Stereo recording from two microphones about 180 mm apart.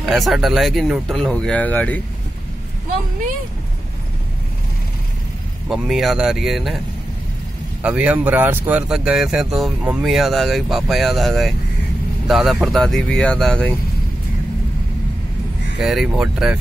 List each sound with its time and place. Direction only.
0.0 s speech: centre (ahead or behind)
5.7 s speech: centre (ahead or behind)
7.8 s speech: 5° right (ahead or behind)
15.8 s speech: centre (ahead or behind)